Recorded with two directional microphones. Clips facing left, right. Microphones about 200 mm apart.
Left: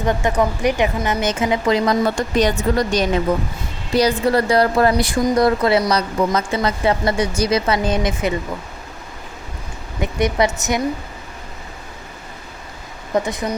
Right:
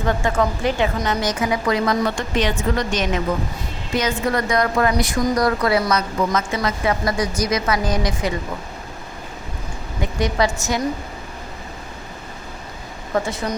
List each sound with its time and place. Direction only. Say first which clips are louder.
0.0 s a woman's voice: left 2 dB; 20° left (ahead or behind)
2.1 s a woman's voice: left 4 dB; 40° left (ahead or behind); by 8.3 s 25° left (ahead or behind)
10.0 s a woman's voice: left 2 dB; 20° left (ahead or behind)
13.1 s speech: left 2 dB; 15° left (ahead or behind)